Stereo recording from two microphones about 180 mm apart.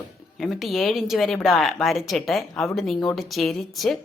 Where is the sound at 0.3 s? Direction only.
Centre (ahead or behind).